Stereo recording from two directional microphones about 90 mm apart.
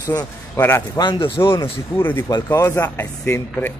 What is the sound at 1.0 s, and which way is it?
Speech, 65° left (ahead or behind).